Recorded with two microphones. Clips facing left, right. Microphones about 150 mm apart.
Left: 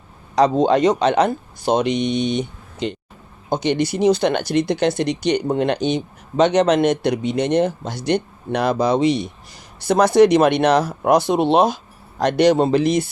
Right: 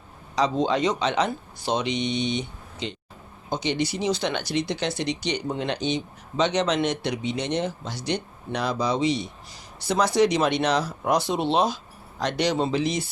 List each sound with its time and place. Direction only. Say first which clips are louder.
0.3 s speech: left 8 dB; 50° left (ahead or behind)